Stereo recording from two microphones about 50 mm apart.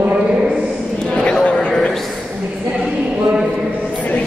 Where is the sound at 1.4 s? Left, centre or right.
Left.